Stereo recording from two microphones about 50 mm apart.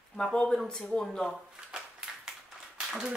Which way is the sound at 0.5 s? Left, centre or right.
Centre.